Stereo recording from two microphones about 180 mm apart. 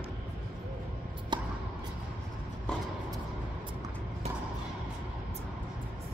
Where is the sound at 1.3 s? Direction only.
25° right (ahead or behind).